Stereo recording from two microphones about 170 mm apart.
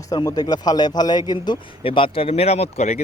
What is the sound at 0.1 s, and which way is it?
A man's voice, 20° left (ahead or behind).